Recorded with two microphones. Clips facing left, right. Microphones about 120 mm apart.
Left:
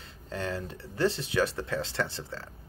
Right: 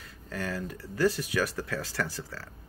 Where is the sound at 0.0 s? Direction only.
25° left (ahead or behind).